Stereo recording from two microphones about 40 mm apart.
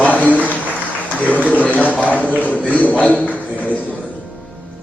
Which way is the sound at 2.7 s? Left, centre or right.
Left.